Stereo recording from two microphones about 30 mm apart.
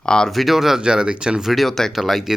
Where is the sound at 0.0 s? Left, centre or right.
Left.